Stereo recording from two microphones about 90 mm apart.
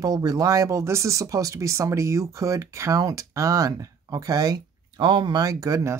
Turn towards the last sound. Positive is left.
turn(degrees=-40)  # may be behind; listen again after turning